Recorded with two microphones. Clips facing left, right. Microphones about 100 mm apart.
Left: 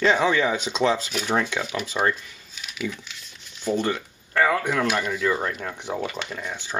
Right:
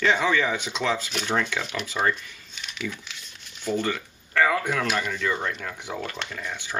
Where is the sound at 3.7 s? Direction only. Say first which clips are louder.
Left 2 dB; 25° left (ahead or behind).